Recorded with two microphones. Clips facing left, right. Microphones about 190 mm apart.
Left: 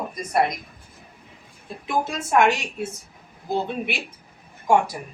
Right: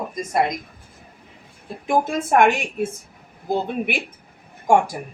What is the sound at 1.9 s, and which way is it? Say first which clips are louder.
A woman's voice: right 4 dB; 55° right (ahead or behind).